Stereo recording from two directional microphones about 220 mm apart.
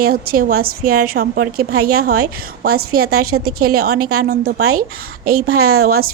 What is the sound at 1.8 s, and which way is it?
A woman's voice, 90° right.